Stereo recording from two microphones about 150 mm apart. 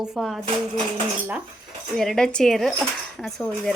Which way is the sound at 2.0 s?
5° left (ahead or behind).